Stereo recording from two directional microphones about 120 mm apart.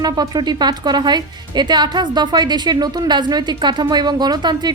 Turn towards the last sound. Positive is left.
turn(degrees=-35)  # may be behind; listen again after turning